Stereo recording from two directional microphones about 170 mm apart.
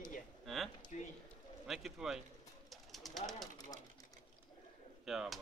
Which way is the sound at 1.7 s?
Centre (ahead or behind).